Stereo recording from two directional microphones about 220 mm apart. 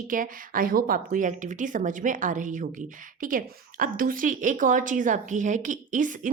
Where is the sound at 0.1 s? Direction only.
40° right (ahead or behind).